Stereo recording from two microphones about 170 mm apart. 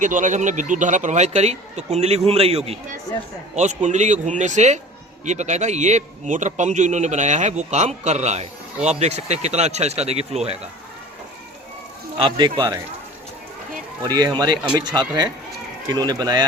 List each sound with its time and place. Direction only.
0.0 s a man's voice: 45° right (ahead or behind)
12.2 s speech: 30° right (ahead or behind)
14.1 s speech: 25° right (ahead or behind)